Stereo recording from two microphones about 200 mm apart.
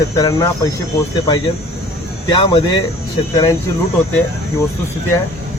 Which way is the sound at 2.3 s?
25° left (ahead or behind).